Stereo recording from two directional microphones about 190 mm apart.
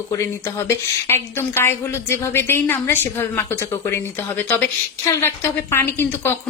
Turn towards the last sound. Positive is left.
turn(degrees=10)  # may be behind; listen again after turning